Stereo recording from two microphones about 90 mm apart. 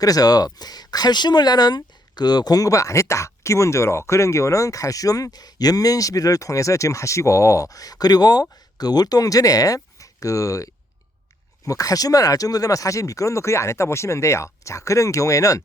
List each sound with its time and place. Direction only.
0.0 s speech: 45° left (ahead or behind)